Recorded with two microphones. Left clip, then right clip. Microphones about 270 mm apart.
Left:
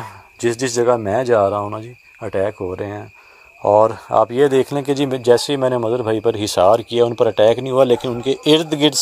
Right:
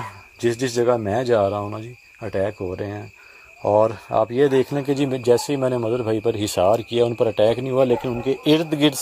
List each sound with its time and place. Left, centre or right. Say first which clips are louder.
0.4 s speech: left 3 dB; left
5.9 s speech: left 4 dB; left
6.2 s speech: left 6 dB; left
7.6 s speech: left 4 dB; left
8.5 s speech: left 4 dB; left